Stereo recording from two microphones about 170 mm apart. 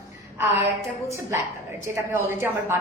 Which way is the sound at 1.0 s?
15° right (ahead or behind).